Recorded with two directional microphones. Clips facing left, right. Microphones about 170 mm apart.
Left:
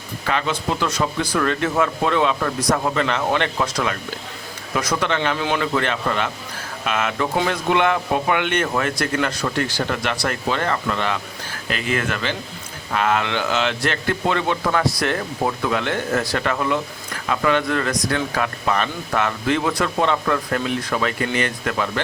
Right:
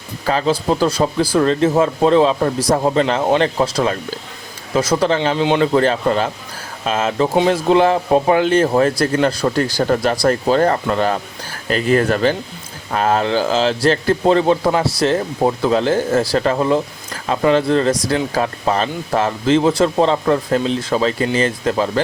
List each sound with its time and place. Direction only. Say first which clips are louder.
0.3 s speech: right 6 dB; 35° right (ahead or behind)
5.7 s speech: right 7 dB; 35° right (ahead or behind)